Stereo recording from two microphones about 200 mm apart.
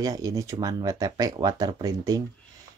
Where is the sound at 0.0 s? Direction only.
20° right (ahead or behind).